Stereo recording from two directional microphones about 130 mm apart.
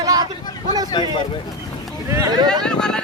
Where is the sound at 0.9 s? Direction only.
35° left (ahead or behind).